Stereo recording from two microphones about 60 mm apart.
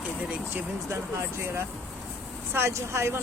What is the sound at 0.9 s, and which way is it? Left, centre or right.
Speech, right.